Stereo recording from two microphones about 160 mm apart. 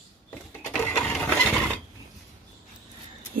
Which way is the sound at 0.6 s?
10° left (ahead or behind).